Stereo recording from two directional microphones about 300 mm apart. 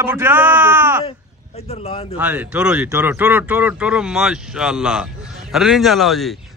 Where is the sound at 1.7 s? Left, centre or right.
Centre.